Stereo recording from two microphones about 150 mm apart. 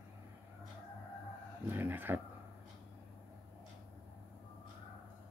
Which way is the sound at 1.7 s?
15° right (ahead or behind).